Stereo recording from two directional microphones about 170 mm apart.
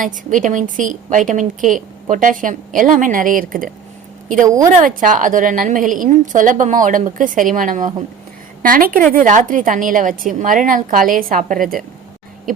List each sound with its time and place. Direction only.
0.0 s a woman's voice: 50° right (ahead or behind)
4.4 s a woman's voice: 20° right (ahead or behind)
4.7 s a woman's voice: 50° right (ahead or behind)